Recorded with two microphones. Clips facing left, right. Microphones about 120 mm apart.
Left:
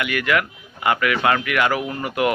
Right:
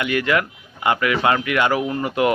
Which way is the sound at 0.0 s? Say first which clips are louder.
Right 1 dB; 25° right (ahead or behind).